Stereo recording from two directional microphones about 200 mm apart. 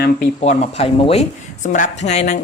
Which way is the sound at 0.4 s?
30° left (ahead or behind).